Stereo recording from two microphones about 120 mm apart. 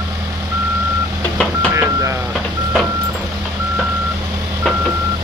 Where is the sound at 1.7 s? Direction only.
25° right (ahead or behind).